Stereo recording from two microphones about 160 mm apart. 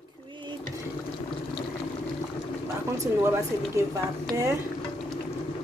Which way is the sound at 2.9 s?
15° right (ahead or behind).